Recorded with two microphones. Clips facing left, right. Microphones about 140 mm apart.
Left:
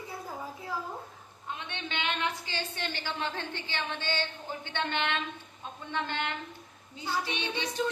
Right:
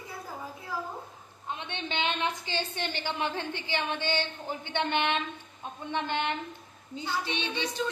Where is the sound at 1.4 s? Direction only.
20° right (ahead or behind).